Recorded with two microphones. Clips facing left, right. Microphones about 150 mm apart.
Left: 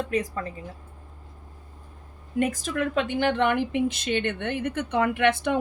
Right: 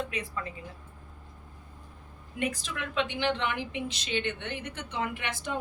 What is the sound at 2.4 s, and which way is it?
A woman's voice, 45° left (ahead or behind).